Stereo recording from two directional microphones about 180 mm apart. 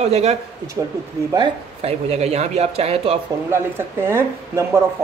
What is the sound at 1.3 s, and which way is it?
Speech, 30° right (ahead or behind).